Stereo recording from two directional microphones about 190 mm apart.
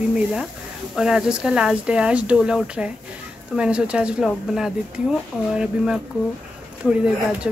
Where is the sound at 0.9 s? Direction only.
5° right (ahead or behind).